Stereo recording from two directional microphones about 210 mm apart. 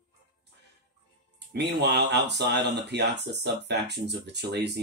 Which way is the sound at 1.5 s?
55° right (ahead or behind).